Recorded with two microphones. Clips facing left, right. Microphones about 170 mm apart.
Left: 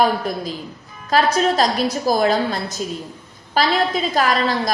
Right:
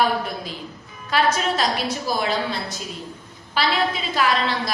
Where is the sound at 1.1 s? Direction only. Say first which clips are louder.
Left 4 dB; 40° left (ahead or behind).